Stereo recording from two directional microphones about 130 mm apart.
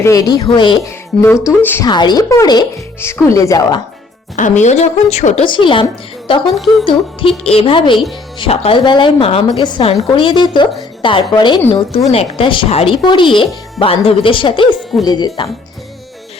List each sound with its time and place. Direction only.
0.0 s speech: 25° left (ahead or behind)
1.8 s speech: 35° left (ahead or behind)
4.4 s a woman's voice: 70° left (ahead or behind)
5.5 s a woman's voice: 40° left (ahead or behind)
6.5 s speech: centre (ahead or behind)
6.8 s speech: 45° left (ahead or behind)